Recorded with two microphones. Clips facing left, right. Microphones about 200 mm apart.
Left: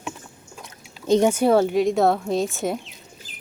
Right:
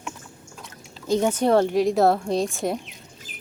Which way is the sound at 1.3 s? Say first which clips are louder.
Left 1 dB; 5° left (ahead or behind).